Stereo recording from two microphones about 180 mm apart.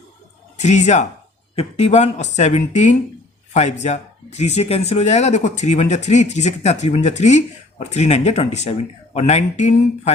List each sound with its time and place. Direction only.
0.5 s speech: 40° left (ahead or behind)